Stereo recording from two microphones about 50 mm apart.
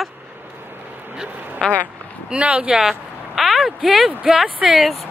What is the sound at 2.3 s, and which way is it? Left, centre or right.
Speech, right.